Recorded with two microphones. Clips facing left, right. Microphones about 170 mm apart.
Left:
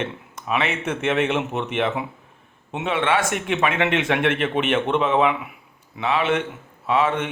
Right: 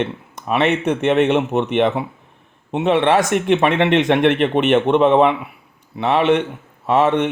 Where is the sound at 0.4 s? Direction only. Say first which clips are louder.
Right 7 dB; 40° right (ahead or behind).